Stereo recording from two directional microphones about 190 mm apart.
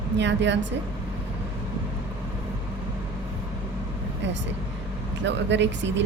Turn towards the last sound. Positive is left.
turn(degrees=-70)  # may be behind; listen again after turning